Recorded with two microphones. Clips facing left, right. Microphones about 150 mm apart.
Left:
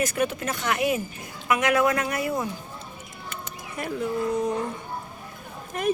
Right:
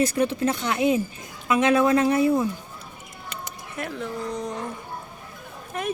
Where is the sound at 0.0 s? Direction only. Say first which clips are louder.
Right 4 dB; 30° right (ahead or behind).